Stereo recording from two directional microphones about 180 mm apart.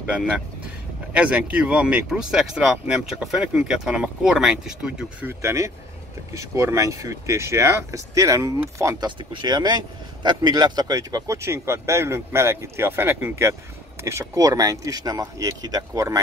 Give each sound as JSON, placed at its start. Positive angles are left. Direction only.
{"t": 1.1, "sound": "speech", "side_deg": -5}
{"t": 5.4, "sound": "speech", "side_deg": -15}